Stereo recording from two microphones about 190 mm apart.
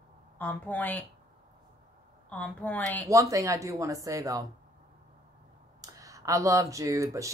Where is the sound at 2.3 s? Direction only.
5° left (ahead or behind).